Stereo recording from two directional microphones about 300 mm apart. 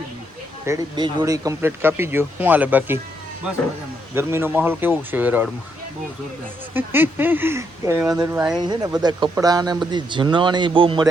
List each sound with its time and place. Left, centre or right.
0.6 s speech: centre
4.1 s speech: centre
6.7 s speech: centre